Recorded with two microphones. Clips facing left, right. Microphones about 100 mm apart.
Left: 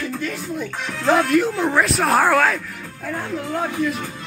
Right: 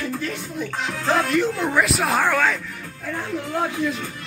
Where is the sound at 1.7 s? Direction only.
Centre (ahead or behind).